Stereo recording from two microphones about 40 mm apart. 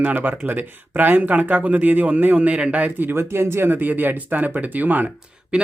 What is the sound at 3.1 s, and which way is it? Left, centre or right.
Speech, right.